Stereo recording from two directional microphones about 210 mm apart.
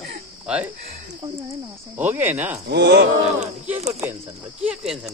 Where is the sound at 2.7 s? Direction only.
55° right (ahead or behind).